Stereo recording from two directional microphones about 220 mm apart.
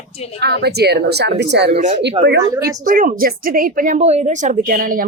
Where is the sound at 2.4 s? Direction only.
15° right (ahead or behind).